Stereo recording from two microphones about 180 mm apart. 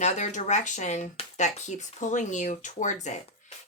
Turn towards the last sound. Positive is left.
turn(degrees=40)  # may be behind; listen again after turning